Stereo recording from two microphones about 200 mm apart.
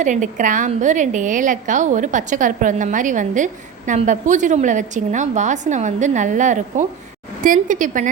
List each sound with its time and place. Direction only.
0.0 s a woman's voice: 40° right (ahead or behind)